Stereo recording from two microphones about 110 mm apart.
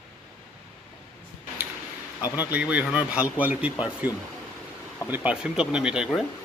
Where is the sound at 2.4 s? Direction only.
10° right (ahead or behind).